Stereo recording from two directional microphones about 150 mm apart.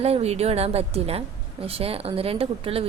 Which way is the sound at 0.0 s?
45° right (ahead or behind).